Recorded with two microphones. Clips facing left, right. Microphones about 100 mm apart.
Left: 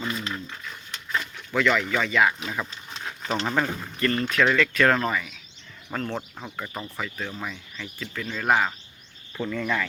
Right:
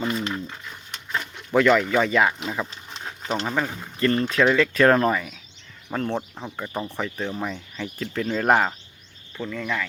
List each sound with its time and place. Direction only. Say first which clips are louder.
0.3 s a sound: right 3 dB; 15° right (ahead or behind)
1.5 s speech: right 5 dB; 40° right (ahead or behind)
2.4 s speech: right 3 dB; 15° right (ahead or behind)
3.0 s a sound: right 1 dB; 20° right (ahead or behind)
3.4 s speech: left 1 dB; 5° right (ahead or behind)
4.0 s speech: right 3 dB; 30° right (ahead or behind)
5.9 s speech: right 4 dB; 20° right (ahead or behind)
7.5 s speech: right 6 dB; 40° right (ahead or behind)
9.4 s speech: left 1 dB; centre (ahead or behind)